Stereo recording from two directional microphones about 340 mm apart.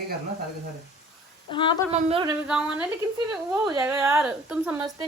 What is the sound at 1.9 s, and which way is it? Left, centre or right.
Speech, centre.